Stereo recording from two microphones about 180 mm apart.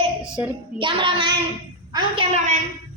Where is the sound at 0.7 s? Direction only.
30° right (ahead or behind).